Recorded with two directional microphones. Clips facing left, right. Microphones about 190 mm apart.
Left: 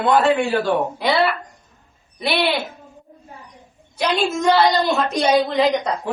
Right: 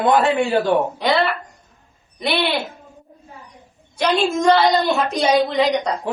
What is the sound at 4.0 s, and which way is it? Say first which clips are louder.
A woman's voice: right 2 dB; centre (ahead or behind).